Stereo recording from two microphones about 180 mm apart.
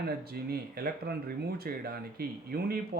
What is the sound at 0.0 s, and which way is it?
Speech, 60° right (ahead or behind).